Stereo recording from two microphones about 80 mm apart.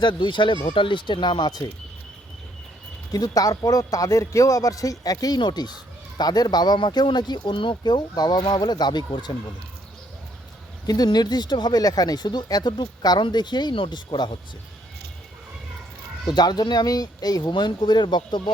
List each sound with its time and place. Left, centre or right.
0.0 s speech: left
3.1 s speech: left
5.4 s speech: left
10.8 s speech: left
16.2 s speech: left
17.5 s speech: left